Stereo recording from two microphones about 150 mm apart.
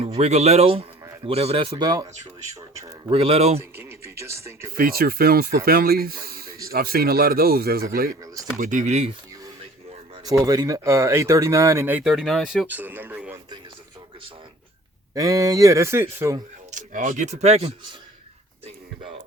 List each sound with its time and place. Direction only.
0.0 s speech: 45° right (ahead or behind)
1.7 s speech: 25° right (ahead or behind)
3.1 s speech: 40° right (ahead or behind)
3.6 s speech: 15° right (ahead or behind)
4.7 s speech: 80° right
8.5 s speech: 55° right (ahead or behind)
10.4 s speech: 25° right (ahead or behind); by 12.6 s centre (ahead or behind)
12.6 s speech: 10° right (ahead or behind)
15.1 s speech: 20° right (ahead or behind)
16.7 s speech: 55° right (ahead or behind)
18.6 s a sound: 40° right (ahead or behind)